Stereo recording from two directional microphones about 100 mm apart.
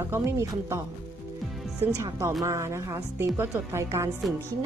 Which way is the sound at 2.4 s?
30° right (ahead or behind).